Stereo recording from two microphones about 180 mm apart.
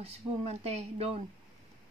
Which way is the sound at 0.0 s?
35° right (ahead or behind).